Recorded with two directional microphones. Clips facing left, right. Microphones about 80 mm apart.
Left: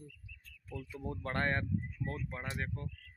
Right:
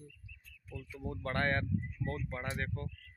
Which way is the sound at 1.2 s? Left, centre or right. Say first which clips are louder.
Right 1 dB; centre.